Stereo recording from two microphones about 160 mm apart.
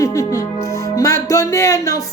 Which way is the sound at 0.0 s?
20° left (ahead or behind).